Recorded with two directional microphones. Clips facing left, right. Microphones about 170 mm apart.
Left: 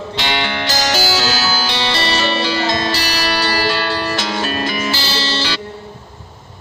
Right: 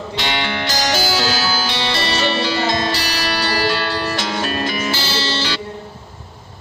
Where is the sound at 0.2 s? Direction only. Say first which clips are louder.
Left 2 dB; 90° left.